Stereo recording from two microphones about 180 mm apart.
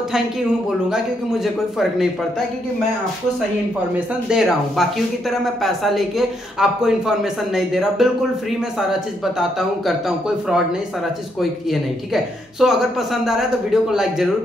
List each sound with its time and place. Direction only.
0.8 s speech: 5° right (ahead or behind)
4.3 s speech: centre (ahead or behind)
11.7 s speech: centre (ahead or behind)